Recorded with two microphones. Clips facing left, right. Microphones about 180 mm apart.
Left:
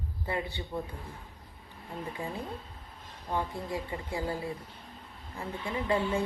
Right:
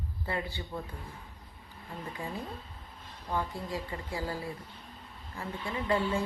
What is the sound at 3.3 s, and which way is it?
Speech, 20° left (ahead or behind).